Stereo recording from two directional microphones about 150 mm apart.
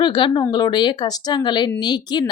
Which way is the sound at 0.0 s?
30° left (ahead or behind).